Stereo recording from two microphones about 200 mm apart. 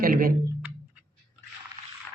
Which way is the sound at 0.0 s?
45° right (ahead or behind).